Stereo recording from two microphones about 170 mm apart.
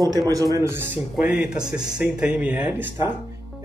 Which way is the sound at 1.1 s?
5° right (ahead or behind).